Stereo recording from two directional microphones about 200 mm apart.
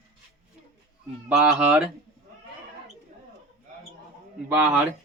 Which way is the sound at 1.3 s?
5° right (ahead or behind).